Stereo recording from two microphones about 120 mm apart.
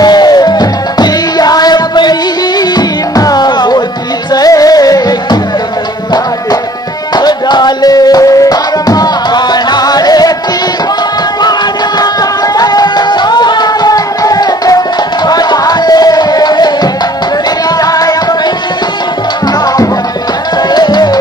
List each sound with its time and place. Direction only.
0.0 s music: 35° left (ahead or behind)
7.2 s music: 35° left (ahead or behind)
12.0 s music: 30° left (ahead or behind)
20.7 s music: 35° left (ahead or behind)